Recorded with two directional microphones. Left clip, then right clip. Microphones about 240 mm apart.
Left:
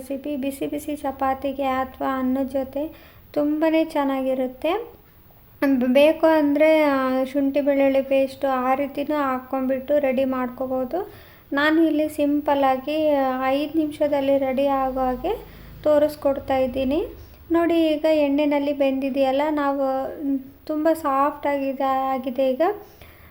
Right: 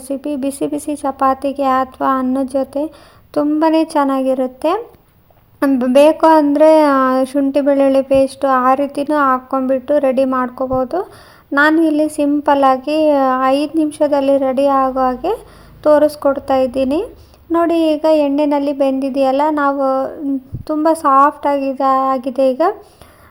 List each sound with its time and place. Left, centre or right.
0.1 s a woman's voice: right